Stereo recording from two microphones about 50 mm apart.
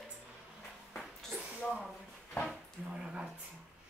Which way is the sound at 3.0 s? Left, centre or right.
Centre.